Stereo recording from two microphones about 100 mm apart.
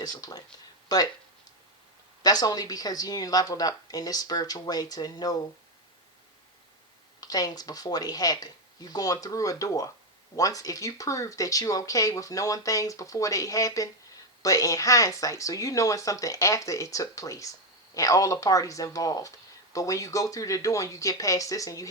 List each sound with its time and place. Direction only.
0.0 s speech: 40° left (ahead or behind)
2.2 s speech: 40° left (ahead or behind)
7.2 s speech: 40° left (ahead or behind)